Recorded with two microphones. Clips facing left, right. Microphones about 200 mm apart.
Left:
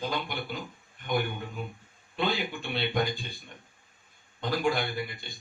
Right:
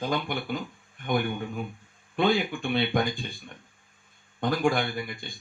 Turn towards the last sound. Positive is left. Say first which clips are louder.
# right 2 dB
turn(degrees=-50)  # may be behind; listen again after turning